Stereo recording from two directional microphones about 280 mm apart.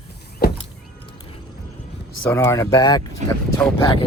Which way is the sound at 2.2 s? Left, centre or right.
Centre.